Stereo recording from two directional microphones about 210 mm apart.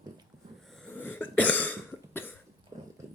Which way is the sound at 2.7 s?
20° right (ahead or behind).